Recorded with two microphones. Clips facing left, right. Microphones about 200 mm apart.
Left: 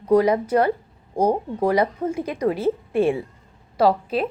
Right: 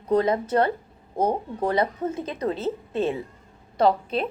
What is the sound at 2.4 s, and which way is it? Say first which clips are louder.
Speech: left 5 dB; 10° left (ahead or behind).